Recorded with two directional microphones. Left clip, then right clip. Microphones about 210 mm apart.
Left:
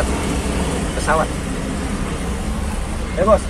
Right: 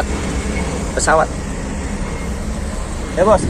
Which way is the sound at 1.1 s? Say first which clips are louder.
Right 4 dB; 35° right (ahead or behind).